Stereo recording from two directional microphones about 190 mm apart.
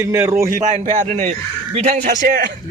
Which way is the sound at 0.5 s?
40° right (ahead or behind).